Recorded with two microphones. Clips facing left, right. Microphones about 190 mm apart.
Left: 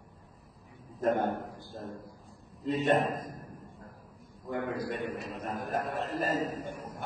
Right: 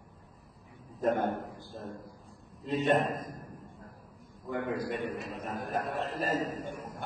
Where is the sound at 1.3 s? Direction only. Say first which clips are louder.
Even; centre (ahead or behind).